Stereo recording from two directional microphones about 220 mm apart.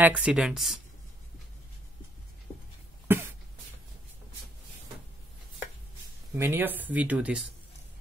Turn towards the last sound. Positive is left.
turn(degrees=-5)  # may be behind; listen again after turning